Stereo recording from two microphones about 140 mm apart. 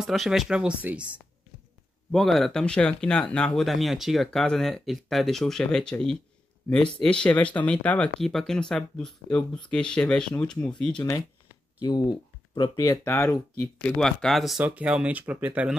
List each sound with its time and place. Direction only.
0.0 s speech: centre (ahead or behind)
2.0 s speech: centre (ahead or behind)
11.8 s speech: 30° left (ahead or behind)
12.8 s speech: 20° left (ahead or behind)
13.8 s speech: 5° left (ahead or behind)